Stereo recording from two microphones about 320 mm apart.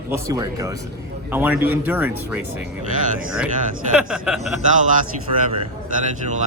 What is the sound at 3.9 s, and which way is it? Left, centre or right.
Speech, centre.